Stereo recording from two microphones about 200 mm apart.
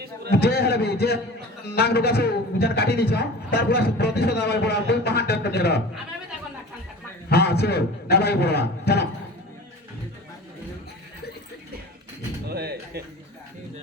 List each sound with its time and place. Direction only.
0.3 s a man's voice: 55° left (ahead or behind)
7.3 s a man's voice: 55° left (ahead or behind)
12.5 s a sound: 55° right (ahead or behind)